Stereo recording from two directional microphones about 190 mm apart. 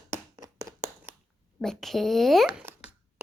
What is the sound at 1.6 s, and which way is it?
A child's voice, centre (ahead or behind).